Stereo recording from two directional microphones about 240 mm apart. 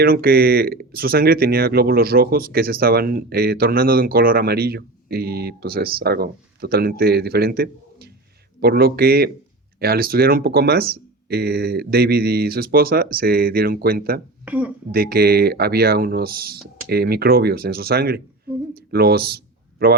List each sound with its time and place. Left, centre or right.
0.0 s speech: right
14.4 s speech: centre
14.9 s speech: right